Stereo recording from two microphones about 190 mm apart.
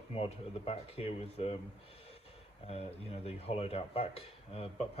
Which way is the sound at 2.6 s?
35° left (ahead or behind).